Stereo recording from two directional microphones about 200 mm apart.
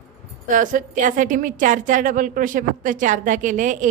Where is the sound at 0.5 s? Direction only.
40° right (ahead or behind).